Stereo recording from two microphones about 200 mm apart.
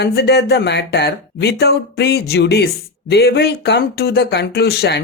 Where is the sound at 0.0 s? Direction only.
55° left (ahead or behind).